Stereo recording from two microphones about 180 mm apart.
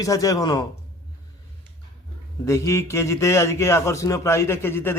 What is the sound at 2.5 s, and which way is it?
A man's voice, 15° left (ahead or behind).